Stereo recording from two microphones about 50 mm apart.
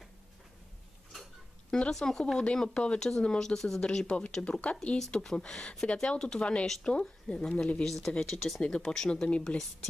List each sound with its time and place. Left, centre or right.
1.7 s speech: centre
7.8 s speech: centre
9.5 s a woman's voice: left